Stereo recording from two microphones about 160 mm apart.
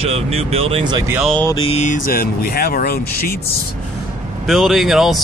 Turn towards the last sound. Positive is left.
turn(degrees=0)  # may be behind; listen again after turning